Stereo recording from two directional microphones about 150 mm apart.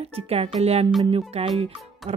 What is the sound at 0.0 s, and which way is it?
Speech, 40° right (ahead or behind).